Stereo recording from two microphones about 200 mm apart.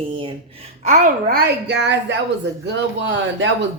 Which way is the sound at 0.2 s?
25° right (ahead or behind).